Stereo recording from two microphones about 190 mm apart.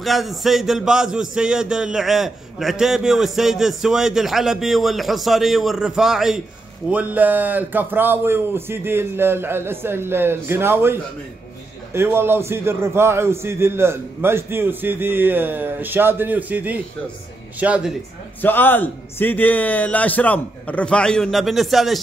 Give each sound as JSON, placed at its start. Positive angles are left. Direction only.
{"t": 0.0, "sound": "a man's voice", "side_deg": 0}
{"t": 18.4, "sound": "a man's voice", "side_deg": 10}